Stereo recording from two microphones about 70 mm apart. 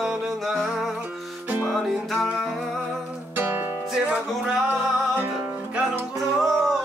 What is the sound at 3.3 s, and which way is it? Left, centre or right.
Music, right.